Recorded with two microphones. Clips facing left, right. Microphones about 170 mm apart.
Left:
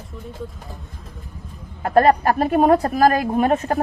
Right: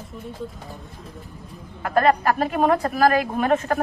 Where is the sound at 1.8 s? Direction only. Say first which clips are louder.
Left 3 dB; 35° left (ahead or behind).